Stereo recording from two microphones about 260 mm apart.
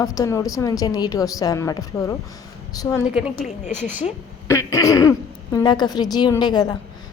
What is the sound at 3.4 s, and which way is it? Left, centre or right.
Speech, left.